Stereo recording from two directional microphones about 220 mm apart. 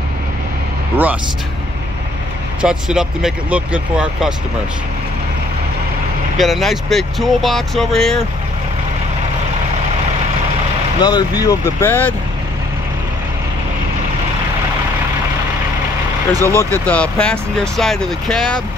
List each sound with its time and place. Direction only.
2.6 s speech: 5° right (ahead or behind)
6.3 s speech: centre (ahead or behind)
11.0 s speech: 20° left (ahead or behind)
16.3 s speech: 15° right (ahead or behind)
16.7 s speech: 5° left (ahead or behind)